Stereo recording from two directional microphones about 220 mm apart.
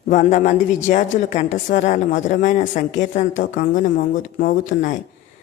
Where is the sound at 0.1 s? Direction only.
35° left (ahead or behind).